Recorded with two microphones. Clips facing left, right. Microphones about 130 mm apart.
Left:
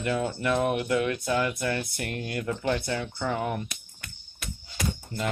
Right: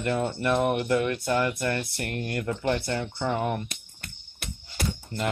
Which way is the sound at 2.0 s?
60° right (ahead or behind).